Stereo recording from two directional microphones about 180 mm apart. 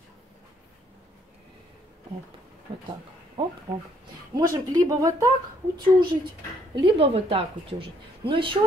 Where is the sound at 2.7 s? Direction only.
25° right (ahead or behind).